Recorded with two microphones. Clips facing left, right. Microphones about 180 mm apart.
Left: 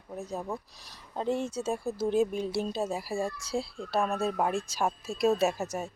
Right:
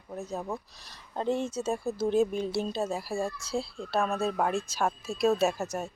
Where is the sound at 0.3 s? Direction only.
5° right (ahead or behind); by 3.7 s 15° left (ahead or behind).